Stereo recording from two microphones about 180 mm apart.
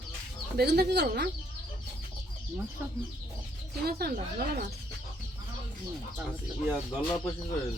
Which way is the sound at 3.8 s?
55° right (ahead or behind).